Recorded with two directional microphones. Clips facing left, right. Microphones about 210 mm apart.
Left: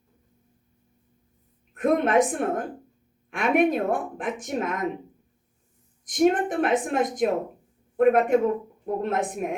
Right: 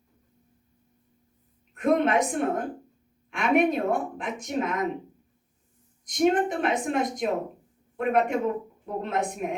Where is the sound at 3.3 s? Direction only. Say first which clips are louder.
Left 1 dB; 50° left (ahead or behind).